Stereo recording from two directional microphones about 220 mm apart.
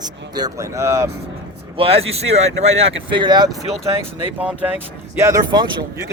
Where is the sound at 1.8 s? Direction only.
25° right (ahead or behind).